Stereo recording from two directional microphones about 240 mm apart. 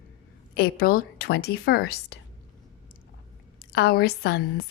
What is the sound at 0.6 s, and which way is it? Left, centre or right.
A woman's voice, left.